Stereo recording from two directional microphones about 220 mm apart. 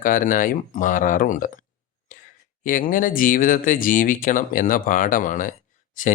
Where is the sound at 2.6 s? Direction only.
40° left (ahead or behind).